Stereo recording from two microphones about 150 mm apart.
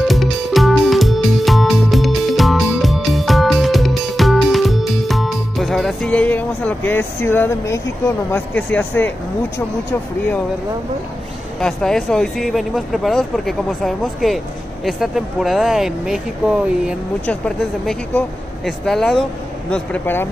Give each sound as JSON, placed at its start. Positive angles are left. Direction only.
{"t": 0.0, "sound": "music", "side_deg": 0}
{"t": 8.3, "sound": "speech", "side_deg": 10}
{"t": 11.6, "sound": "speech", "side_deg": 5}
{"t": 17.3, "sound": "speech", "side_deg": 5}